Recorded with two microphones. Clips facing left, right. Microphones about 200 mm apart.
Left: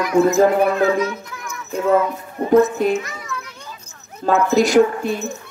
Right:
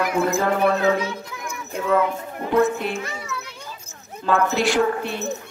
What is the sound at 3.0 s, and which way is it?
Speech, 30° right (ahead or behind).